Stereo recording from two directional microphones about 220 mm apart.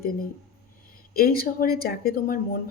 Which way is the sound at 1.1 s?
45° left (ahead or behind).